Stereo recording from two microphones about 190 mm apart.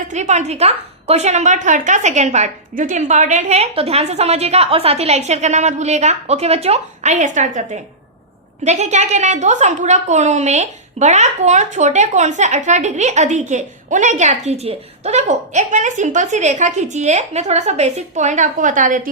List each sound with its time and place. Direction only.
0.1 s a woman's voice: 40° right (ahead or behind)